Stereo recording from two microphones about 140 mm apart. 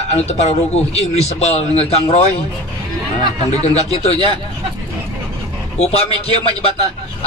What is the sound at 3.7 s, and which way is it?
Speech, 50° left (ahead or behind).